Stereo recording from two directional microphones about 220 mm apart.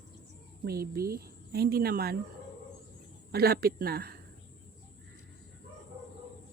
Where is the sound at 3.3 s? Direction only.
45° right (ahead or behind).